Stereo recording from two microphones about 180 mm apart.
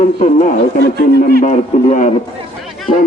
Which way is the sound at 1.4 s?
40° left (ahead or behind).